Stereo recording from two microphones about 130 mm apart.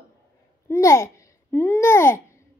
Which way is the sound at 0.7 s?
20° left (ahead or behind).